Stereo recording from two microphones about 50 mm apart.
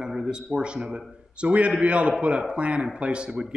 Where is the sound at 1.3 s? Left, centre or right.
Right.